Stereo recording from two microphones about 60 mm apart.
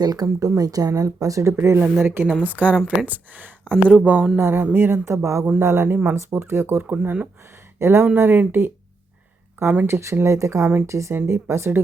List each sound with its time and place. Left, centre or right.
0.0 s speech: right
1.5 s speech: right
2.4 s speech: right
4.4 s speech: right
5.5 s speech: right
6.8 s speech: right
7.8 s speech: right
9.8 s speech: right
11.1 s speech: right